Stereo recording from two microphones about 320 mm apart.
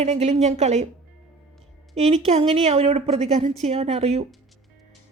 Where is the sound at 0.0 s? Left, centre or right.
Centre.